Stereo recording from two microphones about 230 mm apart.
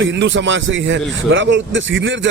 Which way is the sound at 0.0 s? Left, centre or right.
Right.